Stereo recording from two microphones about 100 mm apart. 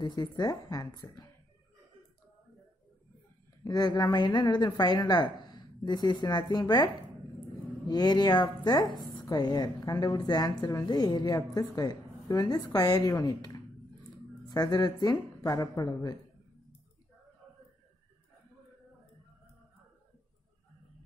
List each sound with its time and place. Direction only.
0.0 s a woman's voice: 45° left (ahead or behind)
3.6 s a woman's voice: 40° left (ahead or behind)